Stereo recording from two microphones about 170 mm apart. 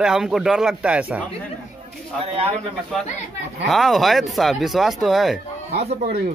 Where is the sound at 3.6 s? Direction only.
Centre (ahead or behind).